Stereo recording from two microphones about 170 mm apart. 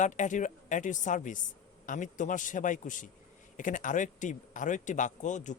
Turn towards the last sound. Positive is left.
turn(degrees=45)  # may be behind; listen again after turning